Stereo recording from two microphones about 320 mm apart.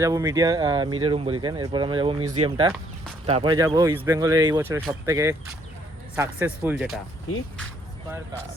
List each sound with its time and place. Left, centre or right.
0.0 s speech: centre